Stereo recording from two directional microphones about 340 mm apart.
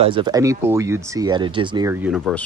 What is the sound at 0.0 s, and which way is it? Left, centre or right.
Speech, centre.